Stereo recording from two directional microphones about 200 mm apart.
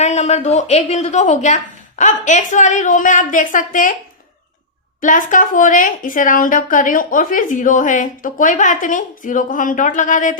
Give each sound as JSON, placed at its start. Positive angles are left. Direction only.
{"t": 0.0, "sound": "a woman's voice", "side_deg": 35}
{"t": 4.9, "sound": "a woman's voice", "side_deg": 40}